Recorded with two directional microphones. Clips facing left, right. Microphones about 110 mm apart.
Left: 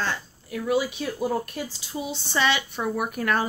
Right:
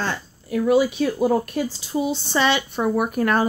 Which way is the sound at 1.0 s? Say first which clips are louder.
Right 7 dB; 50° right (ahead or behind).